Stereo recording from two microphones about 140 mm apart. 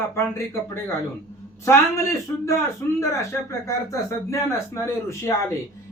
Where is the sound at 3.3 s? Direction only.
20° left (ahead or behind).